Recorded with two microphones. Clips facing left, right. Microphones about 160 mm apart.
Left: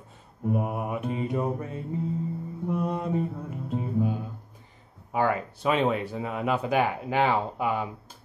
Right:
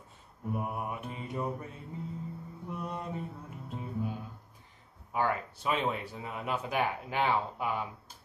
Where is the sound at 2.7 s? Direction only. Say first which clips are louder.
Left 10 dB; 75° left (ahead or behind).